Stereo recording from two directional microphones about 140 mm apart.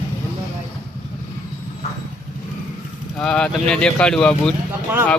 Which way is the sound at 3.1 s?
5° left (ahead or behind).